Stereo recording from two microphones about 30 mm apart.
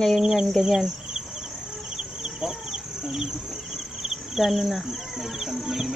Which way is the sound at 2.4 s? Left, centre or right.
Centre.